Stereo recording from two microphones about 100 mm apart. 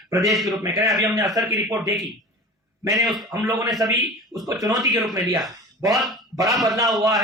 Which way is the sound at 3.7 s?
Centre (ahead or behind).